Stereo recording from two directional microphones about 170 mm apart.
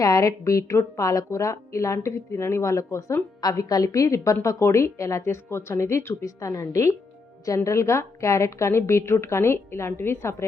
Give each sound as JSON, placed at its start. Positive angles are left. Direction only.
{"t": 0.0, "sound": "speech", "side_deg": 20}